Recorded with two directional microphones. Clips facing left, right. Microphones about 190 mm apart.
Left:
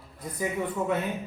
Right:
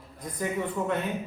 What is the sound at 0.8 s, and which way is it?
Speech, 5° left (ahead or behind).